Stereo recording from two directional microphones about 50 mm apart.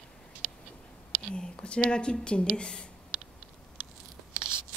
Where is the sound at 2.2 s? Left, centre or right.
Left.